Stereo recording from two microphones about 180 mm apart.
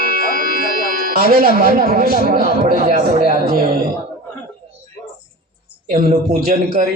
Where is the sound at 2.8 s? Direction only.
45° right (ahead or behind).